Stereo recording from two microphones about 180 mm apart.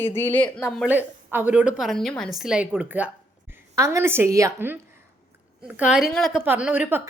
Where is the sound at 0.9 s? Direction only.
10° right (ahead or behind).